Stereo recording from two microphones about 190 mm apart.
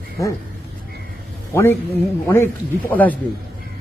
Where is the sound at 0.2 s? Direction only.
15° left (ahead or behind).